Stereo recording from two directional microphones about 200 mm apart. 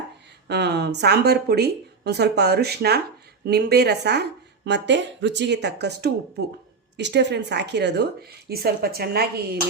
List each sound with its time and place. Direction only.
0.4 s speech: 60° right (ahead or behind)